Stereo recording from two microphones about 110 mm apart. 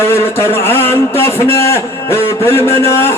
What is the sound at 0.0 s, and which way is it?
A man's voice, 20° left (ahead or behind).